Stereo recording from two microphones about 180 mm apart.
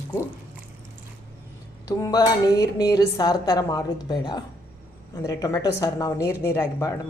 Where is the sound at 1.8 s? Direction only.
20° left (ahead or behind).